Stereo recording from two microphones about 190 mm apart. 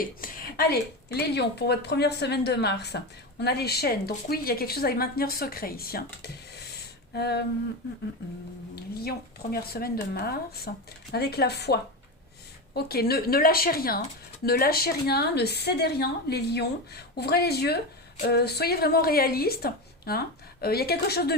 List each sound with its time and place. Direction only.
0.0 s a woman's voice: 50° left (ahead or behind)
7.1 s a woman's voice: 60° left (ahead or behind)
8.7 s a woman's voice: 55° left (ahead or behind)